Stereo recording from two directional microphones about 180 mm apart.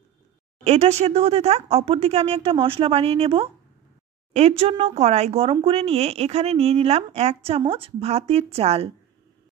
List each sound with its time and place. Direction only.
0.7 s speech: 35° right (ahead or behind)